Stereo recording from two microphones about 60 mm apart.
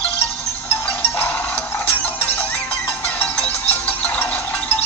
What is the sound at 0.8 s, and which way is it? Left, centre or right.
Music, left.